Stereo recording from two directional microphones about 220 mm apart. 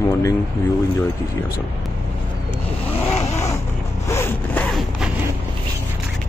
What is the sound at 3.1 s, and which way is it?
Vehicle, 30° left (ahead or behind).